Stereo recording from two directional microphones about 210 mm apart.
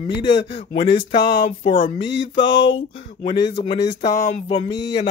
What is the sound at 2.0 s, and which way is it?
Speech, 60° left (ahead or behind).